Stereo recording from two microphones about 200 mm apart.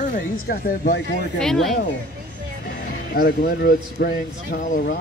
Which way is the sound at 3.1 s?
45° left (ahead or behind).